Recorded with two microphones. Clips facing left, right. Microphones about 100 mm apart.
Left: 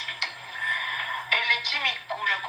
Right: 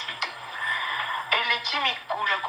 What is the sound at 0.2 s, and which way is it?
Music, 40° right (ahead or behind).